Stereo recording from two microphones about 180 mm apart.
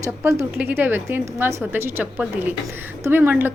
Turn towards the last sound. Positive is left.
turn(degrees=-10)  # may be behind; listen again after turning